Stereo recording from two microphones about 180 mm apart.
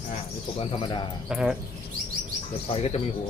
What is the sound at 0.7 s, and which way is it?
Speech, 25° left (ahead or behind).